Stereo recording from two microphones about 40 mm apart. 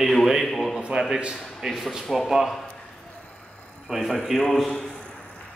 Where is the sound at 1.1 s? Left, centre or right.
Centre.